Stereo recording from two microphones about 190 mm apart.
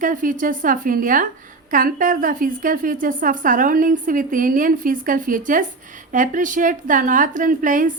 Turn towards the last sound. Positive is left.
turn(degrees=-45)  # may be behind; listen again after turning